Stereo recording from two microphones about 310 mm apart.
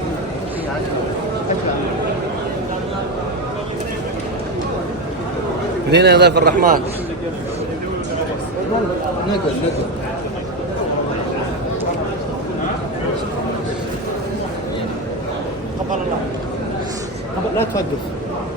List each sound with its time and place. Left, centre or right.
5.9 s a man's voice: right